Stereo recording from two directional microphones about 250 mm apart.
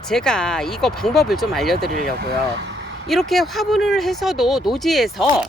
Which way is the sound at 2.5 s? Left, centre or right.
Right.